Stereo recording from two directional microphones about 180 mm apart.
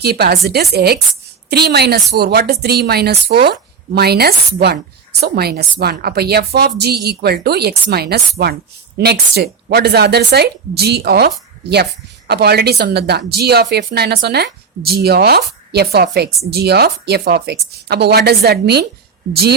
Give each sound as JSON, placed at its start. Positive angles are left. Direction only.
{"t": 0.0, "sound": "a woman's voice", "side_deg": -60}
{"t": 12.3, "sound": "a woman's voice", "side_deg": -60}